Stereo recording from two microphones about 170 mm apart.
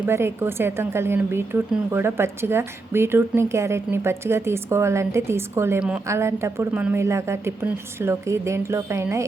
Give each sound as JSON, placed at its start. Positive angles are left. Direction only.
{"t": 0.0, "sound": "a woman's voice", "side_deg": -15}